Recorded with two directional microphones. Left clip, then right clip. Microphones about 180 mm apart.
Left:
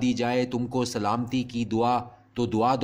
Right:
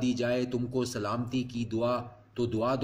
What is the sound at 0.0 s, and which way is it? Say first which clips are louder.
Speech: left 4 dB; 45° left (ahead or behind).